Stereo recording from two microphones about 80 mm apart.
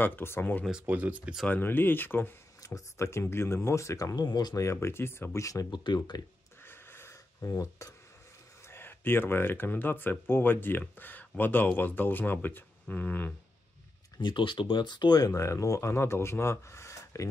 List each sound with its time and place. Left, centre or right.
0.0 s speech: left
0.8 s speech: centre
1.5 s speech: left
2.6 s speech: left
4.6 s speech: left
6.1 s speech: left
6.6 s a sound: left
7.4 s speech: left
7.8 s speech: left
8.6 s speech: left
14.2 s speech: left